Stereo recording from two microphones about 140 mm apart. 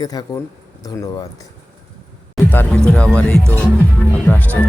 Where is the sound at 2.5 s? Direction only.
15° left (ahead or behind).